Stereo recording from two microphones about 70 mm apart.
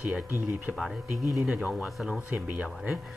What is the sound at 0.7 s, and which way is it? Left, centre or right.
Speech, centre.